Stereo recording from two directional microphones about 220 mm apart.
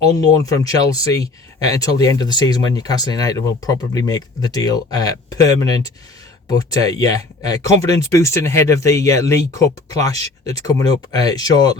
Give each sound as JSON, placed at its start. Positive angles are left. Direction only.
{"t": 0.4, "sound": "speech", "side_deg": 15}